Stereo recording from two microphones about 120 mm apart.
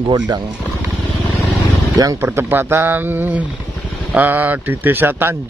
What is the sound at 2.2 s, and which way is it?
Speech, 20° right (ahead or behind).